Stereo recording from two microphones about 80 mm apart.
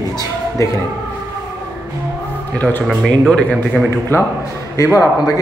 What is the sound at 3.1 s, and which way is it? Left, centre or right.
Speech, centre.